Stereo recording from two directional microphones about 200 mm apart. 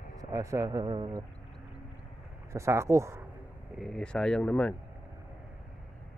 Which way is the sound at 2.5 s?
15° right (ahead or behind).